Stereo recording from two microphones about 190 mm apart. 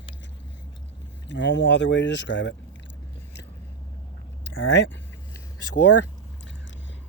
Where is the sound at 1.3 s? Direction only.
70° left (ahead or behind).